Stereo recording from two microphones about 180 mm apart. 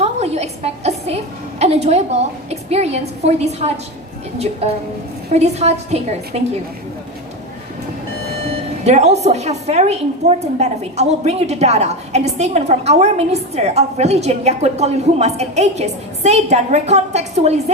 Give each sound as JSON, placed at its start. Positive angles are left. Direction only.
{"t": 0.0, "sound": "a woman's voice", "side_deg": -35}
{"t": 8.8, "sound": "a woman's voice", "side_deg": -35}